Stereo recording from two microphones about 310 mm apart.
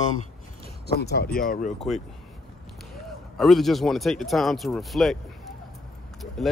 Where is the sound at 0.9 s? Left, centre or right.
Left.